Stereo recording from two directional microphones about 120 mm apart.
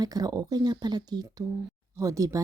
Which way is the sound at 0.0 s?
30° right (ahead or behind).